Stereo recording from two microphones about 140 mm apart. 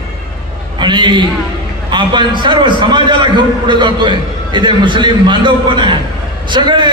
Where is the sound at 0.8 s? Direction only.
35° right (ahead or behind).